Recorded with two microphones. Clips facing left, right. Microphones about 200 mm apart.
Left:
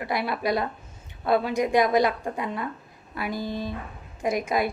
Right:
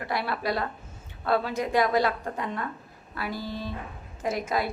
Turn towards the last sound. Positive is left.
turn(degrees=15)  # may be behind; listen again after turning